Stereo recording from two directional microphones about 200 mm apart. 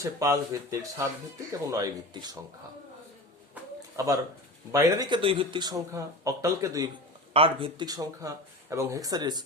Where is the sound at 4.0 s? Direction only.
15° right (ahead or behind).